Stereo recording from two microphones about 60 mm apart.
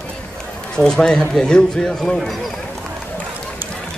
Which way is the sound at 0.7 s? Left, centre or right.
Centre.